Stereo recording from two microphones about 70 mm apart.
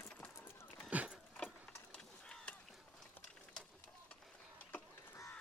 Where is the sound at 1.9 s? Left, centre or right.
Centre.